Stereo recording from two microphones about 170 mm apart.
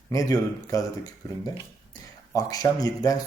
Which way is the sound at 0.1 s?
20° left (ahead or behind).